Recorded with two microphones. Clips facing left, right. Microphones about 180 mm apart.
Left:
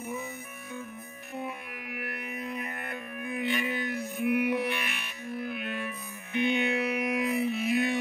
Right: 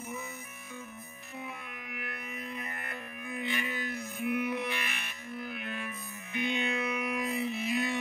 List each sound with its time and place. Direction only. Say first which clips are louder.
2.0 s music: left 5 dB; 60° left (ahead or behind)
6.3 s music: left 5 dB; 60° left (ahead or behind)